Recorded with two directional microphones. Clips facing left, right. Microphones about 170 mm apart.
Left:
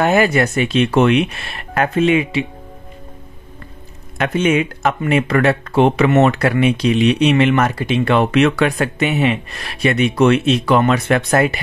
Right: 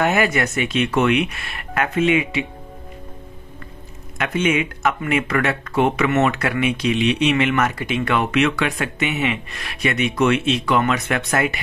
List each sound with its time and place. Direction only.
0.0 s speech: 30° left (ahead or behind)
4.2 s speech: 35° left (ahead or behind)